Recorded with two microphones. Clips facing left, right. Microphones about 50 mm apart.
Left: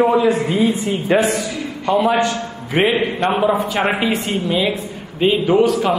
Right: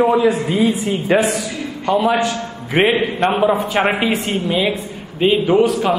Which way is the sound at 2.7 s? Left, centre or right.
Right.